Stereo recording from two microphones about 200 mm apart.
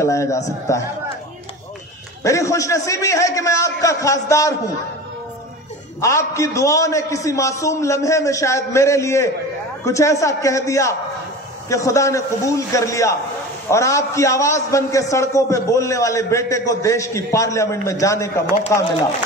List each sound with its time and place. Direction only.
0.0 s a man's voice: 15° left (ahead or behind)
2.2 s a man's voice: 15° left (ahead or behind)
5.9 s a man's voice: 15° left (ahead or behind)